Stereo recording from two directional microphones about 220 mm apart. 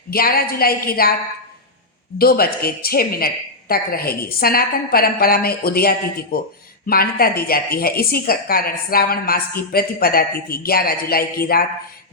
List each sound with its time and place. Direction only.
0.1 s a woman's voice: 45° left (ahead or behind)
2.1 s a woman's voice: 45° left (ahead or behind)